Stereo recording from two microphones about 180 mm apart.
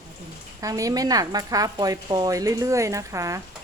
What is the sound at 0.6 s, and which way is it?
Speech, 20° right (ahead or behind).